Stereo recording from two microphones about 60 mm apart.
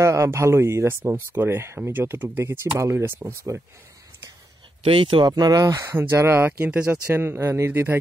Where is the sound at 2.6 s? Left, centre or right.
Right.